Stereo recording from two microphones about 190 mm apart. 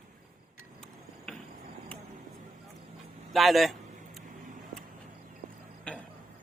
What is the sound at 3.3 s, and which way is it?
Speech, centre (ahead or behind).